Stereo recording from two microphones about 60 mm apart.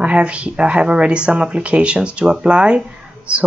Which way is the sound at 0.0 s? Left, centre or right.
Right.